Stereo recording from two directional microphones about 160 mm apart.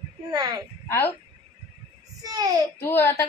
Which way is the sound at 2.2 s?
25° right (ahead or behind).